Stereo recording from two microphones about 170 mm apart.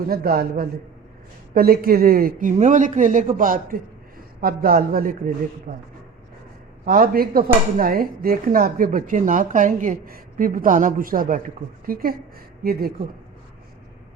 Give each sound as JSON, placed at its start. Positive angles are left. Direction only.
{"t": 0.1, "sound": "speech", "side_deg": -60}
{"t": 6.8, "sound": "speech", "side_deg": -60}